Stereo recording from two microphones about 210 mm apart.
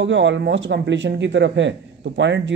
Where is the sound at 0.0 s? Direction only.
60° right (ahead or behind).